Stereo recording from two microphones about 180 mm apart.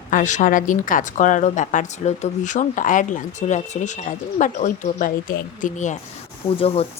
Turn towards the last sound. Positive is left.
turn(degrees=30)  # may be behind; listen again after turning